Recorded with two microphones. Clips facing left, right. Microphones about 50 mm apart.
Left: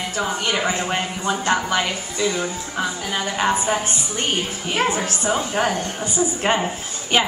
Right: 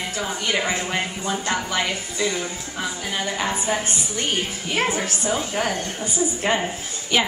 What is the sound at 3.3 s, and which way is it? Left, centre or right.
A woman's voice, left.